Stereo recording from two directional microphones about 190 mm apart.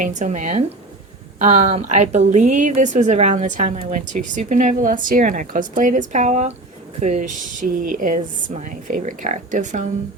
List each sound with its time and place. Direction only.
0.0 s a woman's voice: 40° right (ahead or behind)